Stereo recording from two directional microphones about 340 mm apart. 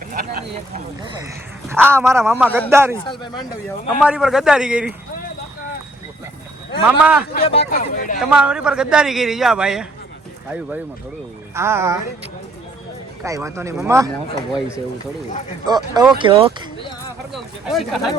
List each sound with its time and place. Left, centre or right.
1.7 s speech: centre
4.0 s a man's voice: centre
6.8 s a man's voice: centre
7.3 s speech: centre
8.2 s a man's voice: centre
11.5 s speech: centre
13.2 s speech: centre
15.6 s speech: centre
17.3 s a man's voice: centre